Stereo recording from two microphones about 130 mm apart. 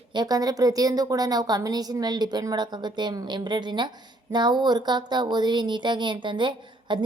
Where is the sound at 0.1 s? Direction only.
30° right (ahead or behind).